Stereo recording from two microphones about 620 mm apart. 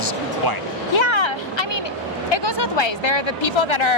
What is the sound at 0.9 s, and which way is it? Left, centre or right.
Vehicle, left.